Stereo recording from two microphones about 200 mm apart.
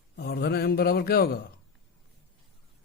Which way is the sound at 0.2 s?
50° left (ahead or behind).